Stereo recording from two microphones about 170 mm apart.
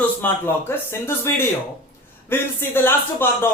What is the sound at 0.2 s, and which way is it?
A woman's voice, 15° left (ahead or behind).